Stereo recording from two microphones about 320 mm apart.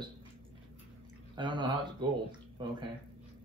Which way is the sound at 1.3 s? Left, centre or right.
Centre.